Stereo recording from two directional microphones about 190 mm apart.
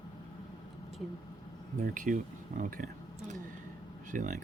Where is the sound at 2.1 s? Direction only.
45° right (ahead or behind).